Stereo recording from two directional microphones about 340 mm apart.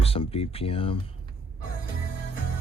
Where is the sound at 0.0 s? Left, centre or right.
Centre.